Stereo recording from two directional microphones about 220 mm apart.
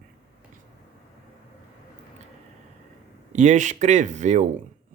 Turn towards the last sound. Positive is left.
turn(degrees=-35)  # may be behind; listen again after turning